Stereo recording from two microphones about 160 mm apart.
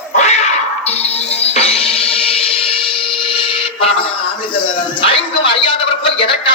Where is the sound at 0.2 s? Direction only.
45° left (ahead or behind).